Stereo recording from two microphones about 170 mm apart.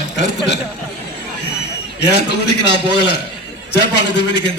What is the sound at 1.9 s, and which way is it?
Speech, 85° left.